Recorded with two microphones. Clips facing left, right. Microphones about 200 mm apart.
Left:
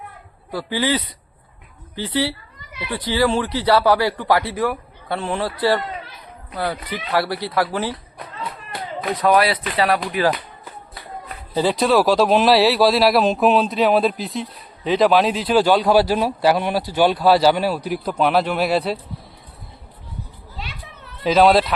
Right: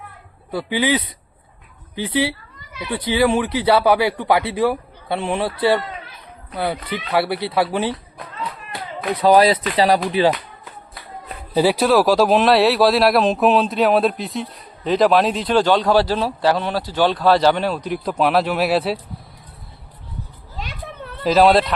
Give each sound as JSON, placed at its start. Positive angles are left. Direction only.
{"t": 0.5, "sound": "speech", "side_deg": -15}
{"t": 9.2, "sound": "speech", "side_deg": -35}
{"t": 10.1, "sound": "speech", "side_deg": -25}
{"t": 11.5, "sound": "speech", "side_deg": -10}
{"t": 20.6, "sound": "a sound", "side_deg": -50}
{"t": 21.2, "sound": "speech", "side_deg": 0}